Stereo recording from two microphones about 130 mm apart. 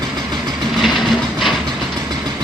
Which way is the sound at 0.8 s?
Centre (ahead or behind).